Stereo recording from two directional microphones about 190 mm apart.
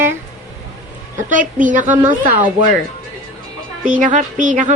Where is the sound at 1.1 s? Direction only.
45° right (ahead or behind).